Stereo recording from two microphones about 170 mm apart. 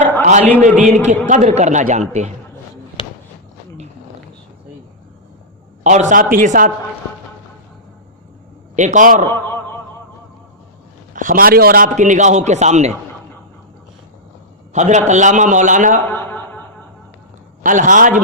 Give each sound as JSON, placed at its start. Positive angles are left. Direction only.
{"t": 0.2, "sound": "a man's voice", "side_deg": -45}
{"t": 5.8, "sound": "a man's voice", "side_deg": -45}
{"t": 8.7, "sound": "a man's voice", "side_deg": -45}
{"t": 11.1, "sound": "a man's voice", "side_deg": -50}
{"t": 14.7, "sound": "a man's voice", "side_deg": -45}
{"t": 16.0, "sound": "a sound", "side_deg": 10}
{"t": 17.6, "sound": "a man's voice", "side_deg": -50}